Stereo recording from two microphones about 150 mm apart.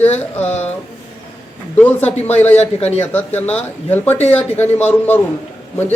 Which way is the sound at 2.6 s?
45° left (ahead or behind).